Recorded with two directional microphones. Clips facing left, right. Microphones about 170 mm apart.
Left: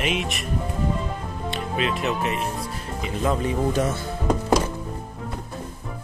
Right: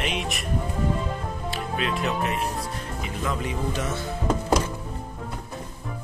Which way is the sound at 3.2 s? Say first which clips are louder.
Left 6 dB; 35° left (ahead or behind).